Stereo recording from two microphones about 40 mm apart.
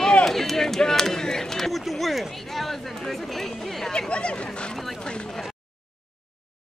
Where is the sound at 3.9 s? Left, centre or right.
Left.